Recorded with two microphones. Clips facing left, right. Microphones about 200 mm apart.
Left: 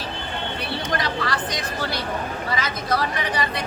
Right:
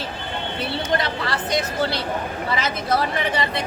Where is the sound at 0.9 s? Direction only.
25° right (ahead or behind).